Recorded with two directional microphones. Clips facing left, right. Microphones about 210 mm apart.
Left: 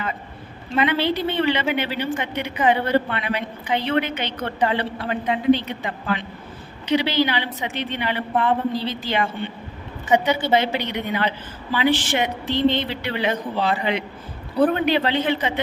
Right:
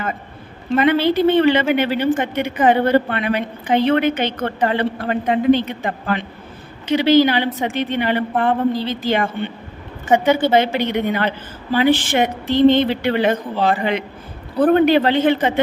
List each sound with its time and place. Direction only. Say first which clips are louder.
0.8 s a woman's voice: right 6 dB; 45° right (ahead or behind)